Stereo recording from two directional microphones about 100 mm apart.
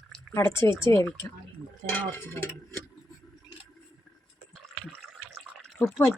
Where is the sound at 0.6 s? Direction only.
25° left (ahead or behind).